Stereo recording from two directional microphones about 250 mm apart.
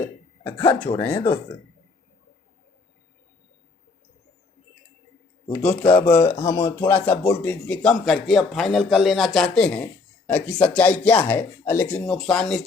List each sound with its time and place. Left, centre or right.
0.6 s speech: left
0.9 s speech: centre
5.9 s speech: centre